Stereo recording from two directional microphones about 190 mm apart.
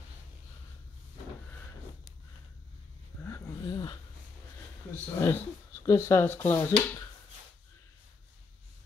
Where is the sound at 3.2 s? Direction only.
20° left (ahead or behind).